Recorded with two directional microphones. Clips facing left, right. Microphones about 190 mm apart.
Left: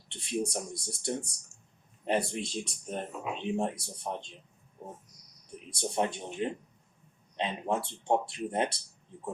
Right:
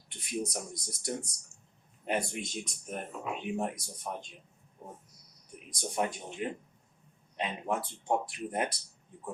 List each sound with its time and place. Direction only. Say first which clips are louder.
0.1 s speech: left 3 dB; 30° left (ahead or behind)
5.7 s speech: left 2 dB; 30° left (ahead or behind)